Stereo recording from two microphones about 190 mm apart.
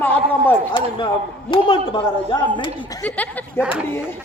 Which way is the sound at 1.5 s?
25° left (ahead or behind).